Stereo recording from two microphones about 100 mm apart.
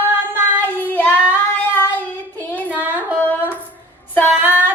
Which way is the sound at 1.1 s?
10° right (ahead or behind).